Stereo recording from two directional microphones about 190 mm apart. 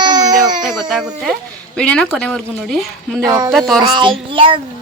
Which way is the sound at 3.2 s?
15° right (ahead or behind).